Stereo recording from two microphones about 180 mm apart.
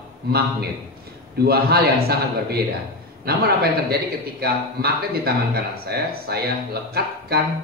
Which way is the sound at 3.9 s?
60° right (ahead or behind).